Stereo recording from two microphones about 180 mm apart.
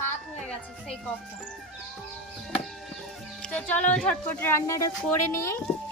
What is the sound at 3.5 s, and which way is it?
A child's voice, 5° left (ahead or behind).